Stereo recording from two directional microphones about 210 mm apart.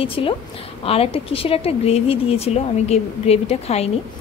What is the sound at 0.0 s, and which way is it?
A woman's voice, 25° left (ahead or behind).